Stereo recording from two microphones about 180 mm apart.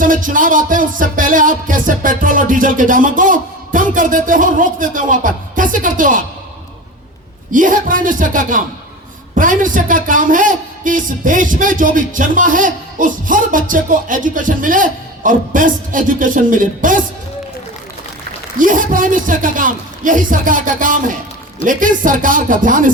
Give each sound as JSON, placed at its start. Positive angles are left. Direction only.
{"t": 0.0, "sound": "a man's voice", "side_deg": -50}
{"t": 7.5, "sound": "a man's voice", "side_deg": -50}
{"t": 18.6, "sound": "a man's voice", "side_deg": -45}